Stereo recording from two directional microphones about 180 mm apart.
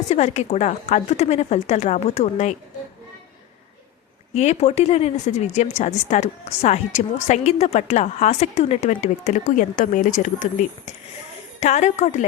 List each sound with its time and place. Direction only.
0.1 s a woman's voice: 40° left (ahead or behind)
4.4 s a woman's voice: 35° left (ahead or behind)